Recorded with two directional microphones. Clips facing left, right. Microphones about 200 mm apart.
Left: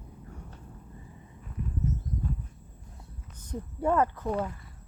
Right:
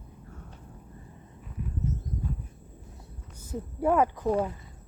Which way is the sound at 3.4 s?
5° right (ahead or behind).